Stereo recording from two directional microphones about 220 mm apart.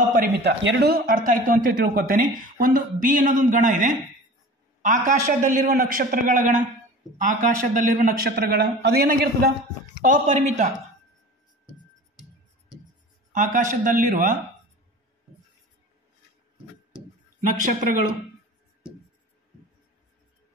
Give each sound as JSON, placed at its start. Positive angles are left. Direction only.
{"t": 0.1, "sound": "a man's voice", "side_deg": -45}
{"t": 13.3, "sound": "a man's voice", "side_deg": -35}